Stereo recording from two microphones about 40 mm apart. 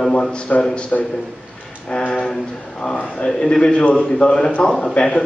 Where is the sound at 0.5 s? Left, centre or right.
Left.